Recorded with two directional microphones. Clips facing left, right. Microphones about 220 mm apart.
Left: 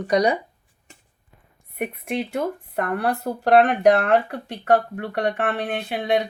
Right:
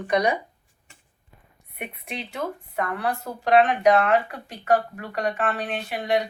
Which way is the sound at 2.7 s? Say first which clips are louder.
Left 3 dB; 60° left (ahead or behind).